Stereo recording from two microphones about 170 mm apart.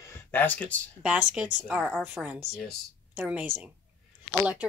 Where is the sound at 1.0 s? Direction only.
5° right (ahead or behind).